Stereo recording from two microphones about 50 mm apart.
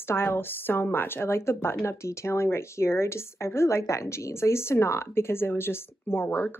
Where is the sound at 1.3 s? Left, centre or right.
Left.